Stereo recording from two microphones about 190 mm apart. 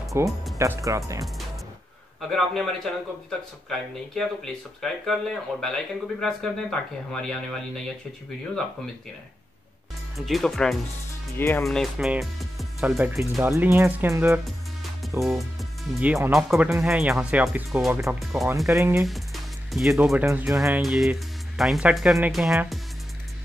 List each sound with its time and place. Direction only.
0.2 s speech: 15° right (ahead or behind)
2.3 s speech: centre (ahead or behind)
10.1 s speech: centre (ahead or behind)
15.0 s music: centre (ahead or behind)
15.9 s speech: 5° right (ahead or behind)
18.7 s speech: 15° right (ahead or behind)
18.9 s speech: centre (ahead or behind)